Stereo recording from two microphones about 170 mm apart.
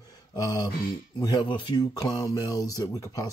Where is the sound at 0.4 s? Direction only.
20° left (ahead or behind).